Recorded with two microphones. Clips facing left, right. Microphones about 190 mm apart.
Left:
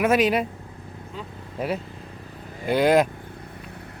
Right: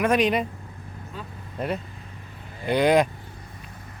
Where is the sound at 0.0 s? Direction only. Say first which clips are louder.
Left 1 dB; 5° left (ahead or behind).